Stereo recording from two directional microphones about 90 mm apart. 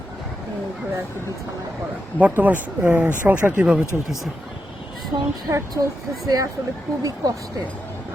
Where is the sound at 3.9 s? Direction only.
5° right (ahead or behind).